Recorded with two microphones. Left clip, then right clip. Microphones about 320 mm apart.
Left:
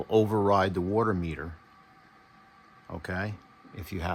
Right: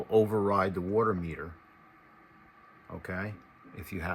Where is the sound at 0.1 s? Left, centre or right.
Left.